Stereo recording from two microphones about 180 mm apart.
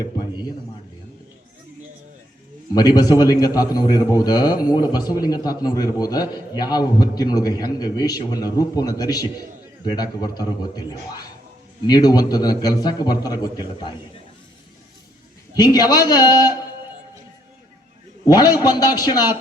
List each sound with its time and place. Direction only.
2.7 s a man's voice: 20° left (ahead or behind)
15.5 s a man's voice: 20° left (ahead or behind)
18.6 s a man's voice: 20° left (ahead or behind)